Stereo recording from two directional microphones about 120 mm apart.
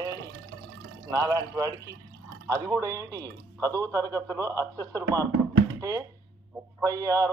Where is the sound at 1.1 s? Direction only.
30° right (ahead or behind).